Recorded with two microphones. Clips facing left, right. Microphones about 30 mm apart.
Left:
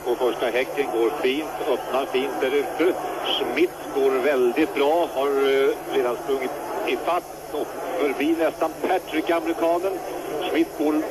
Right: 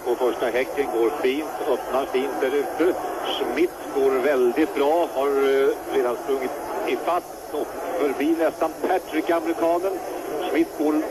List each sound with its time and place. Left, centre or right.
0.1 s a man's voice: centre
4.5 s a man's voice: left